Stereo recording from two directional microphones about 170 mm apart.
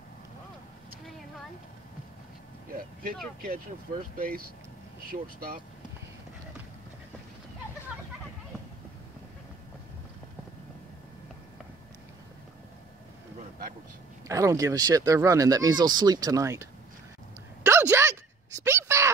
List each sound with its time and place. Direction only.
2.8 s vehicle: 55° right (ahead or behind)
3.3 s speech: 55° right (ahead or behind)
14.2 s speech: 20° right (ahead or behind)
17.6 s a sound: 15° right (ahead or behind)